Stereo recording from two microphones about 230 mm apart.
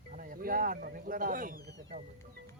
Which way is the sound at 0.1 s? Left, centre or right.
Right.